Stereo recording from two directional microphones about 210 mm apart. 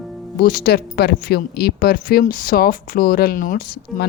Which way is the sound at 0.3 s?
45° left (ahead or behind).